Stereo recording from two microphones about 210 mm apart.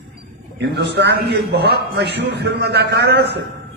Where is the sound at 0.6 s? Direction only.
55° right (ahead or behind).